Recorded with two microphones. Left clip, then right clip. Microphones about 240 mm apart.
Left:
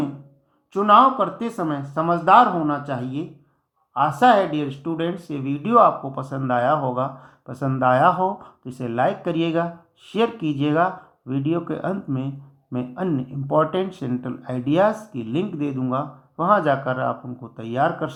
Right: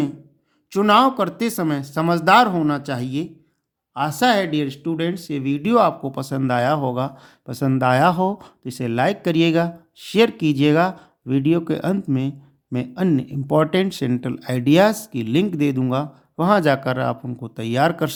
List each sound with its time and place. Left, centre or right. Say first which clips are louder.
0.7 s speech: left 1 dB; right